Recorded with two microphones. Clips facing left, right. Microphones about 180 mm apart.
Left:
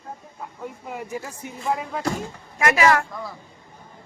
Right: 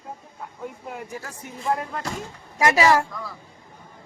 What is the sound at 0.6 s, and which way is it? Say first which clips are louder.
Speech: left 1 dB; centre (ahead or behind).